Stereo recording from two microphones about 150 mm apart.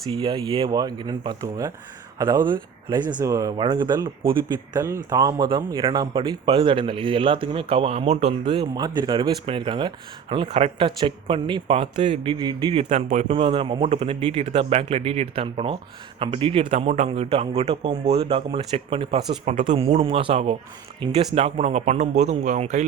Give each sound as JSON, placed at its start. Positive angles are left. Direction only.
{"t": 0.1, "sound": "speech", "side_deg": -30}
{"t": 13.1, "sound": "speech", "side_deg": -50}
{"t": 13.3, "sound": "speech", "side_deg": -35}
{"t": 21.3, "sound": "speech", "side_deg": -45}